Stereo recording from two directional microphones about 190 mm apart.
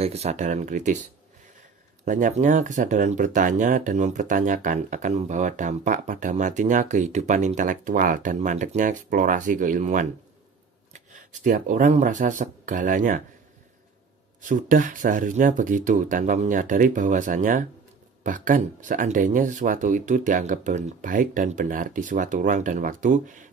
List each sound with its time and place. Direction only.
0.0 s speech: 35° right (ahead or behind)
2.0 s speech: 45° right (ahead or behind)
11.4 s speech: 45° right (ahead or behind)
14.4 s speech: 45° right (ahead or behind)